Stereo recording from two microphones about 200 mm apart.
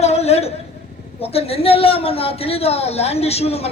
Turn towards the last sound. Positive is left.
turn(degrees=30)  # may be behind; listen again after turning